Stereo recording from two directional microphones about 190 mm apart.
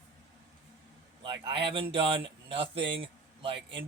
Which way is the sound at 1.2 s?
30° right (ahead or behind).